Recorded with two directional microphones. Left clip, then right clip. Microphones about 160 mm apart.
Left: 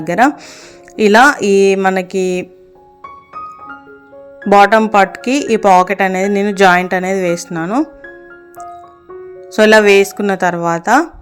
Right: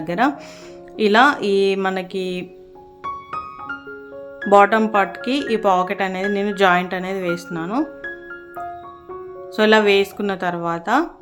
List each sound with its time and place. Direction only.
0.0 s speech: 40° left (ahead or behind)
4.5 s speech: 35° left (ahead or behind)
7.5 s speech: 30° left (ahead or behind)
9.6 s speech: 40° left (ahead or behind)